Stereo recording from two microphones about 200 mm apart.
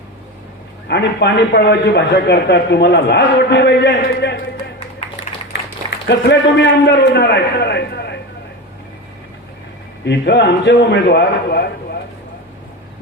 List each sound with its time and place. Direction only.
0.9 s a man's voice: 55° left (ahead or behind)
6.1 s a man's voice: 60° left (ahead or behind)
10.0 s a man's voice: 60° left (ahead or behind)